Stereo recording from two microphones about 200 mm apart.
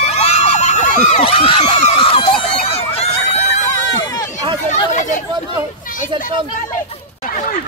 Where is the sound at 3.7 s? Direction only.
20° left (ahead or behind).